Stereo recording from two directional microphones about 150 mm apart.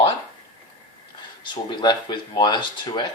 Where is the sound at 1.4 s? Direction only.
30° left (ahead or behind).